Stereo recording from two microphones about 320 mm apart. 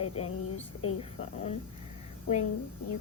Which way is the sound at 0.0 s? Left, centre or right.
Centre.